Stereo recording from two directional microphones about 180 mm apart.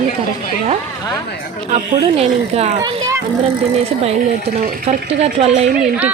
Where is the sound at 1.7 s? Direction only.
35° right (ahead or behind).